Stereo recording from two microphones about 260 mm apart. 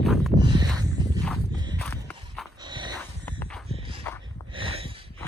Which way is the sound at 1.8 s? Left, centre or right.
Centre.